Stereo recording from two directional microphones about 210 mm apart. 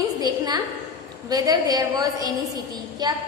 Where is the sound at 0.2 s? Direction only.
20° right (ahead or behind).